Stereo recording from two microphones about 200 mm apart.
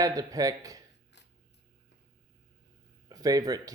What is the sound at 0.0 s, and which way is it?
Speech, 15° right (ahead or behind).